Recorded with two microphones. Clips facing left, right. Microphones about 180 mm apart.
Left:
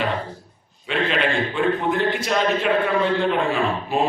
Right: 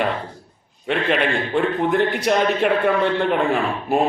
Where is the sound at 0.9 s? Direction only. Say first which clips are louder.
Right 2 dB; 55° right (ahead or behind).